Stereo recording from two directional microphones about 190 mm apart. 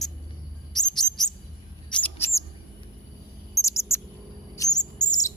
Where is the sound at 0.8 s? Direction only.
Centre (ahead or behind).